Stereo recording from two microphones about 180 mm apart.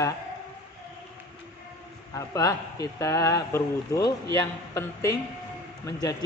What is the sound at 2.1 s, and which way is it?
A man's voice, 20° left (ahead or behind).